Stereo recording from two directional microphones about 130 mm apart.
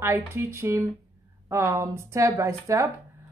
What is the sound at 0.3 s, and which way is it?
Speech, 20° right (ahead or behind).